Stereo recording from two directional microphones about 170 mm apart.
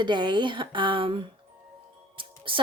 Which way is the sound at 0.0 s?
25° right (ahead or behind).